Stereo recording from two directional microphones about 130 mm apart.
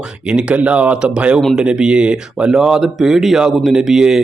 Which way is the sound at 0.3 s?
10° right (ahead or behind).